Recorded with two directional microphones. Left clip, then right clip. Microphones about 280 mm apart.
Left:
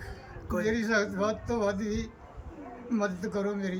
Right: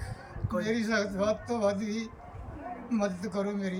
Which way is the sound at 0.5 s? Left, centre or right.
Centre.